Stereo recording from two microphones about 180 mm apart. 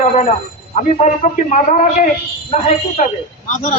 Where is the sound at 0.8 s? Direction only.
40° left (ahead or behind).